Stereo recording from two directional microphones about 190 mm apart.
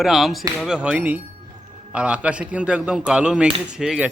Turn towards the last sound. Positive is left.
turn(degrees=-5)  # may be behind; listen again after turning